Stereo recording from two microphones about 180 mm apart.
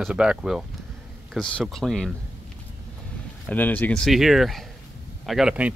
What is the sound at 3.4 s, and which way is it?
Speech, 10° left (ahead or behind).